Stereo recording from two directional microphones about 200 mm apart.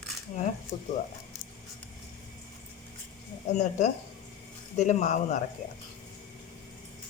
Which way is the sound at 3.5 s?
35° left (ahead or behind).